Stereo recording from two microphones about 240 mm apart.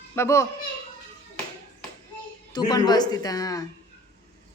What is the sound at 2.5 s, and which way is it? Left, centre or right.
Speech, centre.